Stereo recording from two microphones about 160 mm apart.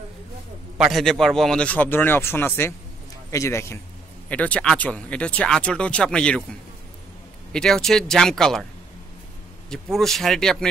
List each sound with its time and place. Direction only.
0.7 s speech: centre (ahead or behind)
7.5 s speech: 5° left (ahead or behind)
9.7 s speech: centre (ahead or behind)